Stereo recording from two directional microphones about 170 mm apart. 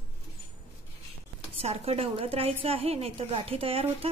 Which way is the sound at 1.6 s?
35° right (ahead or behind).